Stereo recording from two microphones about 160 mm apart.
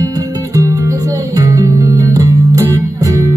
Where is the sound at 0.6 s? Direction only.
20° right (ahead or behind).